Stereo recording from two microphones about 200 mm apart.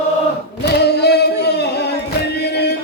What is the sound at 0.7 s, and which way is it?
Singing, 55° left (ahead or behind).